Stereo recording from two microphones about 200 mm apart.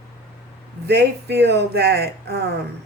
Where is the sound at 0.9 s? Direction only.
55° right (ahead or behind).